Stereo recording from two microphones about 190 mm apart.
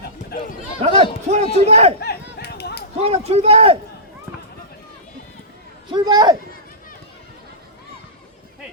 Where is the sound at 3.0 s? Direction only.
35° right (ahead or behind).